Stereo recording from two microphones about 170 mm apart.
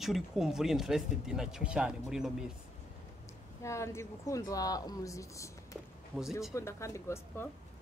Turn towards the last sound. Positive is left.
turn(degrees=15)  # may be behind; listen again after turning